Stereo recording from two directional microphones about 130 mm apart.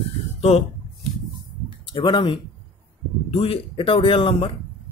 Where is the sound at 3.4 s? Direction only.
45° left (ahead or behind).